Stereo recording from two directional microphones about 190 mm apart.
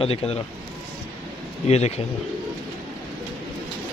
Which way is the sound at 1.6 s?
35° left (ahead or behind).